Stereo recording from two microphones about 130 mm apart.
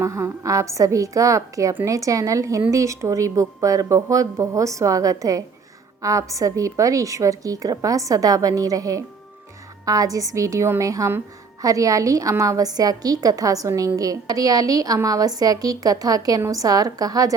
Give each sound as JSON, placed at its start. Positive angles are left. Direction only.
{"t": 0.0, "sound": "a woman's voice", "side_deg": -25}